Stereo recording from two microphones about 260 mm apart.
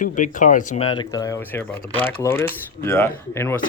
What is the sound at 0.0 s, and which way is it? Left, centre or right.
Speech, left.